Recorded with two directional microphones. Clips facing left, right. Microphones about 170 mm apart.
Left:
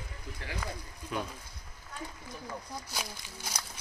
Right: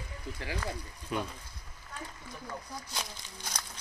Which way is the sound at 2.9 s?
5° left (ahead or behind).